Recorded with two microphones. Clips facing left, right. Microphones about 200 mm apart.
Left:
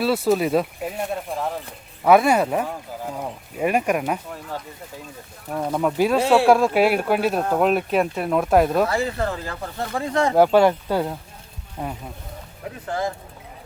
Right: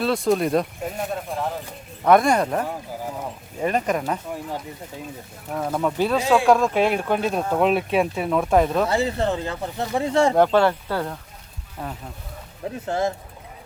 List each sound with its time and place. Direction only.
0.0 s speech: 5° left (ahead or behind)
5.5 s speech: 10° left (ahead or behind)
8.9 s speech: 25° right (ahead or behind)
10.3 s speech: 10° left (ahead or behind)
12.8 s speech: 25° right (ahead or behind)